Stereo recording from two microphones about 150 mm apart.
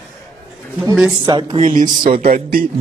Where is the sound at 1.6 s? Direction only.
60° right (ahead or behind).